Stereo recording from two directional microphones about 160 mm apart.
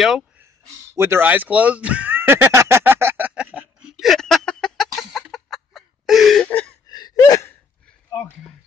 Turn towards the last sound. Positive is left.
turn(degrees=20)  # may be behind; listen again after turning